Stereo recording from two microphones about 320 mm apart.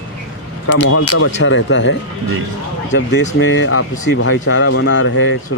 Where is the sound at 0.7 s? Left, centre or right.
Left.